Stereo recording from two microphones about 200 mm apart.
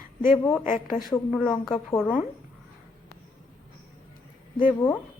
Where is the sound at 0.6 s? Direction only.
40° left (ahead or behind).